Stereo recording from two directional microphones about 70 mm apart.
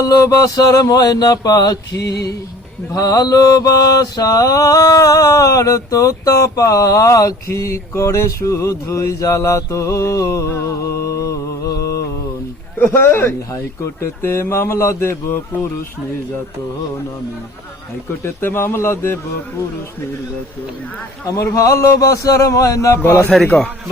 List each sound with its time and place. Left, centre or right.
0.0 s a sound: left
2.9 s mantra: left
12.8 s speech: left
18.2 s speech: left
21.2 s mantra: left
23.3 s a man's voice: centre